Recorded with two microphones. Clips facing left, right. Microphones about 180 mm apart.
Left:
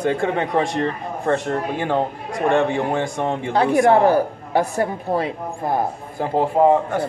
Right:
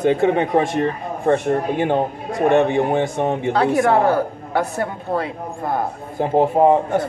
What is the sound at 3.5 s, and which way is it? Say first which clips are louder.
A woman's voice: left 2 dB; 20° left (ahead or behind).